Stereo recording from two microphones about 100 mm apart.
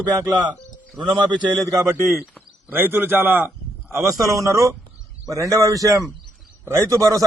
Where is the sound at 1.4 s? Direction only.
45° right (ahead or behind).